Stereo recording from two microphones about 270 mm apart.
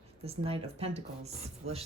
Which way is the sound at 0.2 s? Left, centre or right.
Right.